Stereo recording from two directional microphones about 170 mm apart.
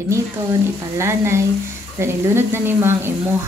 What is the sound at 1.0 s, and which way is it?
Speech, 15° right (ahead or behind).